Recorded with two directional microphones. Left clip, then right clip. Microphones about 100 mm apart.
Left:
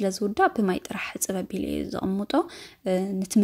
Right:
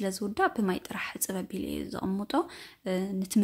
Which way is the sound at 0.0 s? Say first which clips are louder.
Left 6 dB; 30° left (ahead or behind).